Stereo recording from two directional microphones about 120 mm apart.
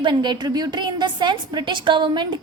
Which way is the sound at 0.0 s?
40° right (ahead or behind).